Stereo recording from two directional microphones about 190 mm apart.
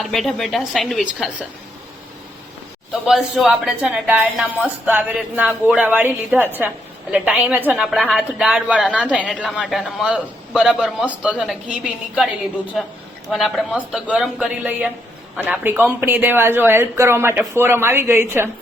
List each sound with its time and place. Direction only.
0.0 s a man's voice: centre (ahead or behind)
2.9 s a woman's voice: centre (ahead or behind)
9.1 s a woman's voice: 5° left (ahead or behind); by 18.4 s 10° right (ahead or behind)